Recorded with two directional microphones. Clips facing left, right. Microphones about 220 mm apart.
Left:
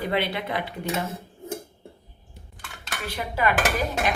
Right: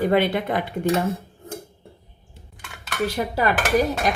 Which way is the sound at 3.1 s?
40° right (ahead or behind).